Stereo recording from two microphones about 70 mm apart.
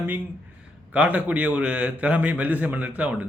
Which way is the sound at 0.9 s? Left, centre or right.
Right.